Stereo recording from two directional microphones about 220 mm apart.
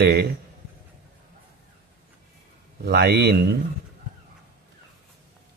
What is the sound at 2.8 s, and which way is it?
Speech, 50° right (ahead or behind).